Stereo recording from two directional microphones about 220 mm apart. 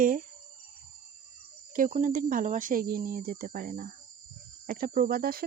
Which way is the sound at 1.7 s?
35° right (ahead or behind).